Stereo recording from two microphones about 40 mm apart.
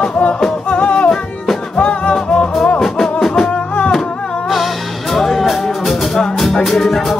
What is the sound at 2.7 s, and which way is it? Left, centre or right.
Music, centre.